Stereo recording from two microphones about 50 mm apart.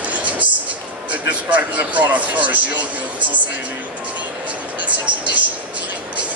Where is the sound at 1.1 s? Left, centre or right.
Right.